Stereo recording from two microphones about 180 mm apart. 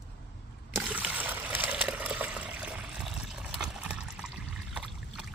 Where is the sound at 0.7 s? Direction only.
5° right (ahead or behind).